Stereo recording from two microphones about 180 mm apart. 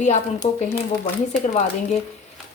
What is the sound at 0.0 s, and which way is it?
Speech, 40° left (ahead or behind).